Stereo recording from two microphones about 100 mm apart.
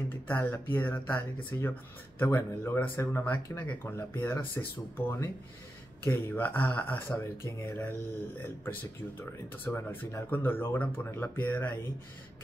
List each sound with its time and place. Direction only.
0.3 s speech: 20° left (ahead or behind)
9.7 s speech: 25° left (ahead or behind)